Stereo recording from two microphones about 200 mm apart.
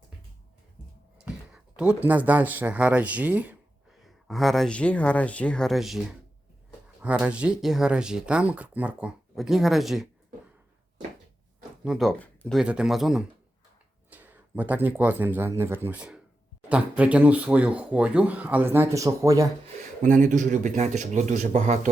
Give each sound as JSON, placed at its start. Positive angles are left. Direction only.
{"t": 1.2, "sound": "speech", "side_deg": -5}
{"t": 11.9, "sound": "speech", "side_deg": 0}
{"t": 20.0, "sound": "speech", "side_deg": -40}